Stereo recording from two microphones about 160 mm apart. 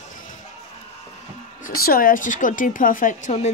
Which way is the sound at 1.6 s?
70° left (ahead or behind).